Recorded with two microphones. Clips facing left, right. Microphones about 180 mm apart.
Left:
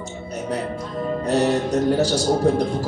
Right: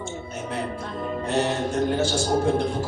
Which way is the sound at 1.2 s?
40° left (ahead or behind).